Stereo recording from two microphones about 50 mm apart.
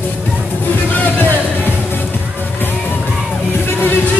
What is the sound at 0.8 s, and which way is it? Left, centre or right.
Music, left.